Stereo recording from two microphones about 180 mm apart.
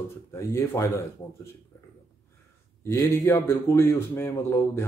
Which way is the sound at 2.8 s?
15° left (ahead or behind).